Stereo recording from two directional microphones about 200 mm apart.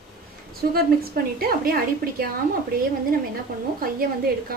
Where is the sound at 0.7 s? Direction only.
50° right (ahead or behind).